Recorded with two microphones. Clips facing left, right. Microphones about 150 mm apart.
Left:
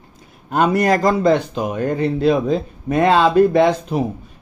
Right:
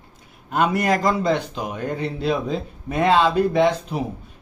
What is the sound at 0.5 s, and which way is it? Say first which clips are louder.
Speech: left 4 dB; 40° left (ahead or behind).